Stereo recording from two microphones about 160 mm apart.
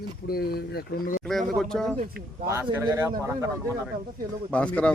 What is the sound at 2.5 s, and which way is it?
Speech, 15° right (ahead or behind).